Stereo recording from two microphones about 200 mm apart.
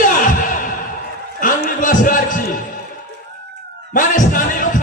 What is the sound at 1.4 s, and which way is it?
A man's voice, 40° left (ahead or behind).